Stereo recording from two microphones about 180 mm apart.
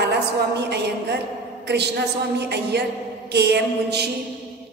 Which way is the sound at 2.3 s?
65° right (ahead or behind).